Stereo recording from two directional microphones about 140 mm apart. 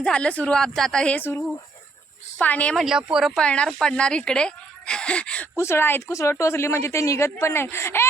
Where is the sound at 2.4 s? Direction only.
10° left (ahead or behind).